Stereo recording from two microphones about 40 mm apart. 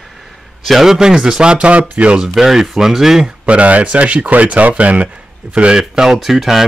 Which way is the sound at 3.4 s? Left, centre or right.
Right.